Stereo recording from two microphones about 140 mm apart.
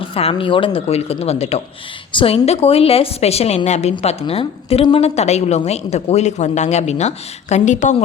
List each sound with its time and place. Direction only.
0.0 s a woman's voice: 45° left (ahead or behind); by 7.9 s 60° left (ahead or behind)